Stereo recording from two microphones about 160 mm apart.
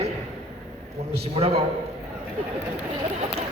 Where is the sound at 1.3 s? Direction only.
40° right (ahead or behind).